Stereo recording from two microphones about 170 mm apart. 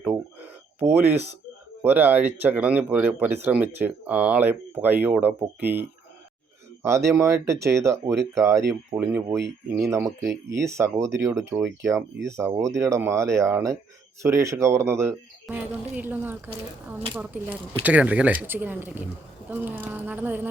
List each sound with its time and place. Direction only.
0.0 s a sound: 10° right (ahead or behind)
1.8 s speech: 10° right (ahead or behind)
7.1 s speech: 15° right (ahead or behind)
9.0 s speech: 5° right (ahead or behind)
9.6 s speech: 15° right (ahead or behind)